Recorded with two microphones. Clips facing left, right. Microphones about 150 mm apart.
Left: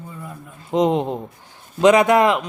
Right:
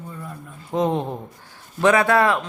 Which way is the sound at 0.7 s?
20° left (ahead or behind).